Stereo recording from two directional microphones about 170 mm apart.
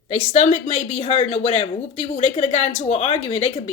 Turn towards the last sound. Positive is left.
turn(degrees=40)  # may be behind; listen again after turning